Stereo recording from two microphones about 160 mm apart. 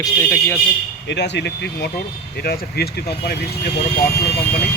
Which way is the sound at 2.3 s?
80° left.